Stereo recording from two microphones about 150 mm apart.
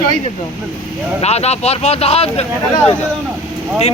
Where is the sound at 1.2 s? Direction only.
45° left (ahead or behind).